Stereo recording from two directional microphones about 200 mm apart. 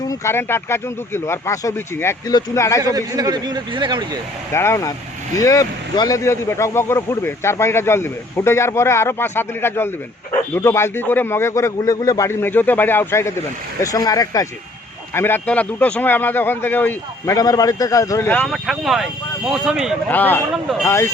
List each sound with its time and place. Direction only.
0.0 s speech: 15° left (ahead or behind)
2.8 s a man's voice: 20° right (ahead or behind)
4.5 s speech: 15° left (ahead or behind); by 20.0 s 5° right (ahead or behind)
20.1 s speech: 10° left (ahead or behind)